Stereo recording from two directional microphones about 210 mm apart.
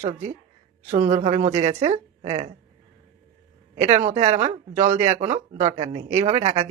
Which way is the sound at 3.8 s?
35° right (ahead or behind).